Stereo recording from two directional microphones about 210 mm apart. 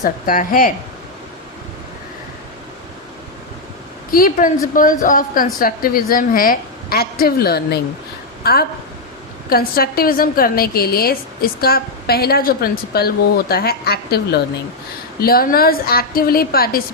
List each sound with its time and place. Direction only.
0.0 s a woman's voice: 40° left (ahead or behind)
4.1 s a woman's voice: 40° left (ahead or behind)